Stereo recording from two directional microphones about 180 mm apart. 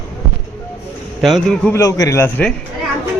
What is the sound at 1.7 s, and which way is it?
Speech, 20° left (ahead or behind).